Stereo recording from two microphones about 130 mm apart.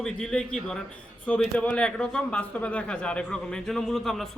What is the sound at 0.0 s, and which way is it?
A man's voice, 5° left (ahead or behind).